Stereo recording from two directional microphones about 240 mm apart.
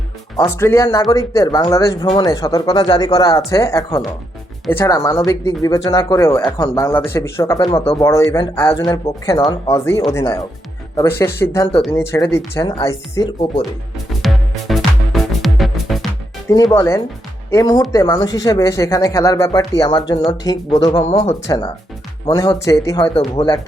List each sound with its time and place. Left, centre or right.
0.3 s speech: centre
14.7 s music: centre
16.7 s speech: centre
20.7 s speech: left
21.4 s speech: centre